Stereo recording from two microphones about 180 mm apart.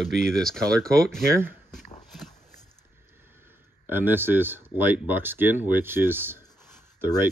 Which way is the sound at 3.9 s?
10° right (ahead or behind).